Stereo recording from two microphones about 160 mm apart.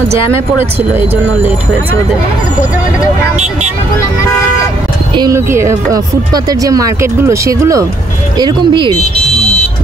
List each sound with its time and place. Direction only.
0.9 s speech: 15° right (ahead or behind)
5.1 s speech: 25° right (ahead or behind)